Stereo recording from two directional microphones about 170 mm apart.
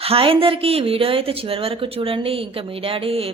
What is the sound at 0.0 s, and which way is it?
Speech, 35° right (ahead or behind).